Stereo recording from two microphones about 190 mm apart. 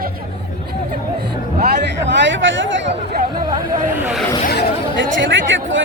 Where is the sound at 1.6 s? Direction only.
60° right (ahead or behind).